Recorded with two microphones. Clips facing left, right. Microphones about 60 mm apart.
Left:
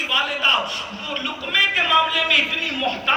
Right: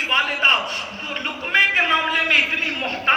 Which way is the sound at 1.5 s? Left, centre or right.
Right.